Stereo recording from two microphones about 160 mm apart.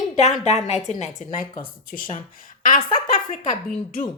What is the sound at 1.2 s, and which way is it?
A woman's voice, 60° left (ahead or behind).